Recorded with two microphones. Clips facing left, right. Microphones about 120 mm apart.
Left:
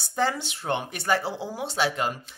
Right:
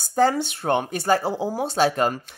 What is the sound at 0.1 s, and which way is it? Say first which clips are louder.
Speech: right 7 dB; 40° right (ahead or behind).